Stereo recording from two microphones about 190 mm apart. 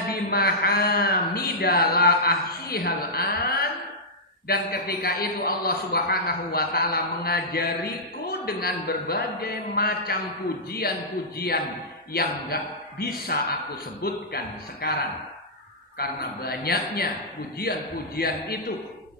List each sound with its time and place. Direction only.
0.1 s a man's voice: 55° left (ahead or behind)
11.3 s a man's voice: 50° left (ahead or behind)
16.0 s a man's voice: 55° left (ahead or behind)